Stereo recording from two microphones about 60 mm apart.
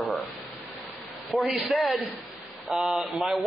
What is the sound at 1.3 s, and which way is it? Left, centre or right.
A man's voice, centre.